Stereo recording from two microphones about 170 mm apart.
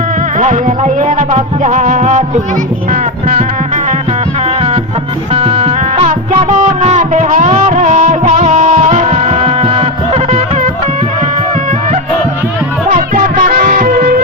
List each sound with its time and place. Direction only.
0.3 s music: 45° right (ahead or behind)
4.4 s music: 40° right (ahead or behind)
13.3 s music: 55° right (ahead or behind)